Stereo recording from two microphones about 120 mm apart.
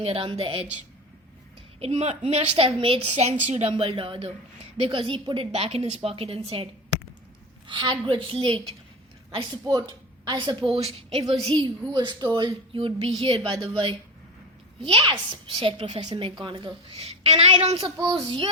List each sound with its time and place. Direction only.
0.0 s a woman's voice: 50° right (ahead or behind)
1.8 s a woman's voice: 65° right (ahead or behind); by 3.1 s 50° right (ahead or behind)
3.1 s a woman's voice: 70° right (ahead or behind)
3.5 s a woman's voice: 55° right (ahead or behind)
7.7 s a woman's voice: 40° right (ahead or behind)
11.4 s a woman's voice: 40° right (ahead or behind)
14.8 s a woman's voice: 45° right (ahead or behind)